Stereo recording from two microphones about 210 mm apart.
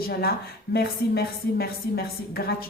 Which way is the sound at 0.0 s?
45° left (ahead or behind).